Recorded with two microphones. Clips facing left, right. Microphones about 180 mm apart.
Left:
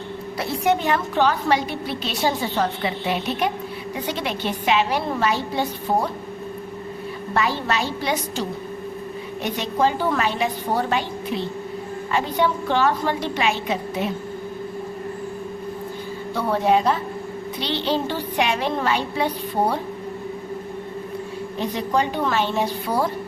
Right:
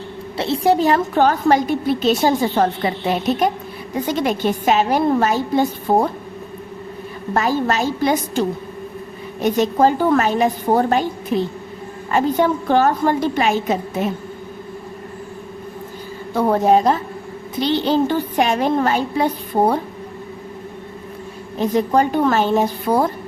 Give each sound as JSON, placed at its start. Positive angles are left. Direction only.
{"t": 0.3, "sound": "a woman's voice", "side_deg": -25}
{"t": 7.3, "sound": "a woman's voice", "side_deg": -45}
{"t": 16.3, "sound": "a woman's voice", "side_deg": -45}
{"t": 21.6, "sound": "a woman's voice", "side_deg": -45}